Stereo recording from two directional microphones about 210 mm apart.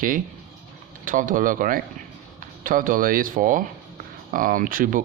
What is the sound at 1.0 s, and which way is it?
Speech, 40° right (ahead or behind).